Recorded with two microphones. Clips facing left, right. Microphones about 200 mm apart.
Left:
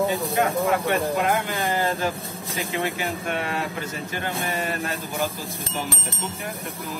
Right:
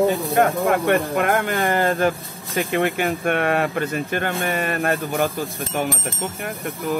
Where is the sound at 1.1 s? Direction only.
55° right (ahead or behind).